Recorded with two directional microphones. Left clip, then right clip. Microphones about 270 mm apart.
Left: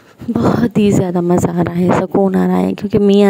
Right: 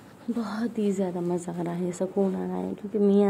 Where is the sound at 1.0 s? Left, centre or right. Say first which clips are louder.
Left 15 dB; left.